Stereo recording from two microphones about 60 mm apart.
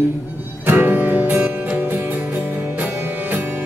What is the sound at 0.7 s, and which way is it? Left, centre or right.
Music, right.